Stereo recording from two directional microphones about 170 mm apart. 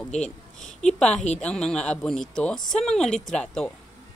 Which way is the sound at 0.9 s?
5° left (ahead or behind).